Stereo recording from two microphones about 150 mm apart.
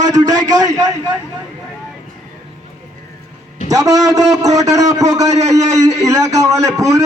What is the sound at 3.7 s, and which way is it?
A man's voice, 20° right (ahead or behind).